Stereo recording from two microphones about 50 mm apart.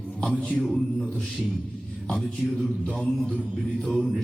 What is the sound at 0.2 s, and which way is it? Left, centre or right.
Speech, centre.